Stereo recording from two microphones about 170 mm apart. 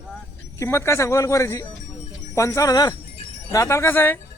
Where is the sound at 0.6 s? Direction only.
15° left (ahead or behind).